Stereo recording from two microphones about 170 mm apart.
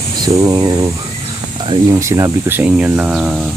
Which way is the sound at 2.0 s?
20° right (ahead or behind).